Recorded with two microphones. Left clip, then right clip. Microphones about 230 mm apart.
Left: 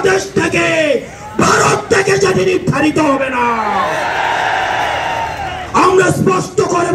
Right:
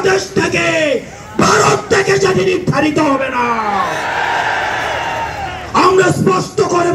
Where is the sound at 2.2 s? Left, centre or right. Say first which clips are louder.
Left 1 dB; left.